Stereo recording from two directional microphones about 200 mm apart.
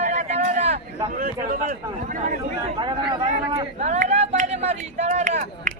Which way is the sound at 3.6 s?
35° right (ahead or behind).